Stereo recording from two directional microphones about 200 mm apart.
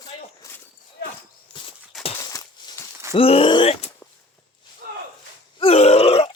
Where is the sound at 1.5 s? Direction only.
25° left (ahead or behind).